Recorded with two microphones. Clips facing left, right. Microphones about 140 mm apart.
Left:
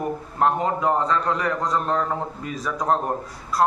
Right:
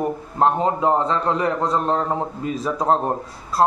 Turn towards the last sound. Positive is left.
turn(degrees=-30)  # may be behind; listen again after turning